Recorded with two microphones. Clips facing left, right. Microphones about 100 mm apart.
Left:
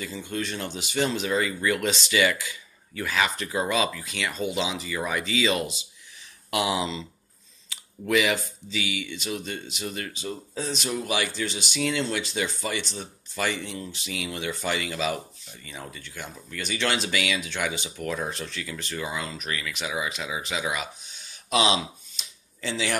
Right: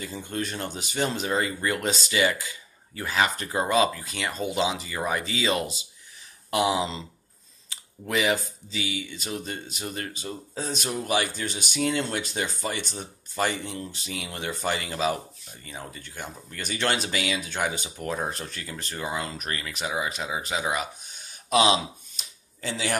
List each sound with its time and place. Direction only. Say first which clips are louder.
0.0 s speech: even; 45° right (ahead or behind)
8.1 s speech: left 1 dB; 35° right (ahead or behind)
13.4 s speech: right 1 dB; 35° right (ahead or behind)
19.6 s speech: right 2 dB; 35° right (ahead or behind)
21.3 s a sound: right 2 dB; 40° right (ahead or behind)